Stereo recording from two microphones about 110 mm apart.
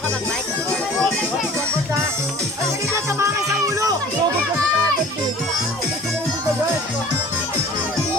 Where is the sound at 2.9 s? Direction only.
30° right (ahead or behind).